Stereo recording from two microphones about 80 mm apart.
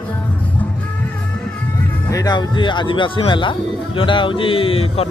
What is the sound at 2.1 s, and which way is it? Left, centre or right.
Music, left.